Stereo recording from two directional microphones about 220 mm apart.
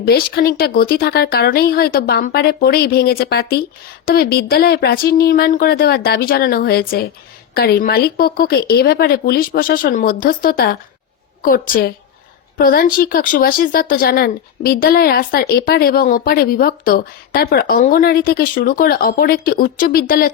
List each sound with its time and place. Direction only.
0.0 s speech: 45° left (ahead or behind)